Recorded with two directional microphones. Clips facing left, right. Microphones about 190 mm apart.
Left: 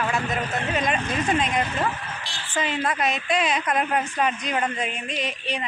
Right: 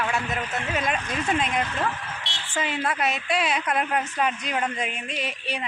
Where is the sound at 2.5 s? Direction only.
5° right (ahead or behind).